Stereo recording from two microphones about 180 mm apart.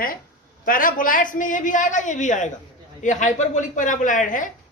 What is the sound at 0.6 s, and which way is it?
Speech, 50° left (ahead or behind).